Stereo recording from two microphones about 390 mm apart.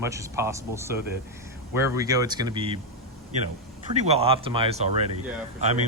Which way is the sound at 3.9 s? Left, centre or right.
Centre.